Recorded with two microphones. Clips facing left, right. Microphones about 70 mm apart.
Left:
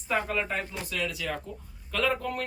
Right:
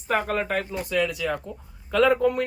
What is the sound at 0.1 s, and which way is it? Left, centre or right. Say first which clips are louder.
Speech: right 4 dB; right.